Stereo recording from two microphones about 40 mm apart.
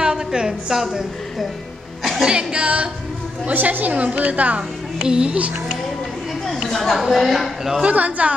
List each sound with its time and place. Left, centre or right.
0.0 s a woman's voice: centre
2.2 s speech: right
3.5 s a woman's voice: right
5.0 s speech: right
6.4 s a sound: centre
7.0 s speech: centre
7.8 s a woman's voice: right